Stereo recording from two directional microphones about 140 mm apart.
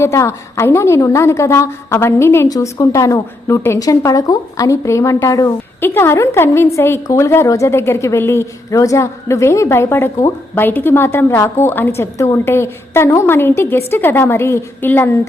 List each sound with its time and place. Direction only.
0.0 s a woman's voice: 20° left (ahead or behind)